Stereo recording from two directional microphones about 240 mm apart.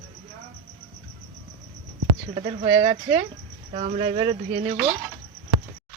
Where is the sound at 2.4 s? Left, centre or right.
Right.